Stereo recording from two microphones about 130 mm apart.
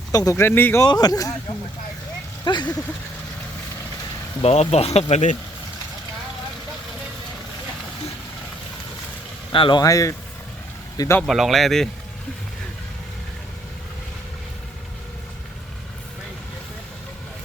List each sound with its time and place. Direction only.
0.1 s speech: 25° left (ahead or behind)
0.9 s speech: 30° left (ahead or behind)
2.4 s speech: 35° left (ahead or behind)
4.4 s speech: 55° left (ahead or behind)
9.5 s speech: 40° left (ahead or behind)
9.8 s speech: 25° left (ahead or behind)
11.2 s speech: centre (ahead or behind)